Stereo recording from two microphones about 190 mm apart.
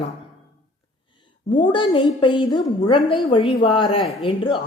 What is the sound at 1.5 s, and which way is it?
A woman's voice, 25° left (ahead or behind).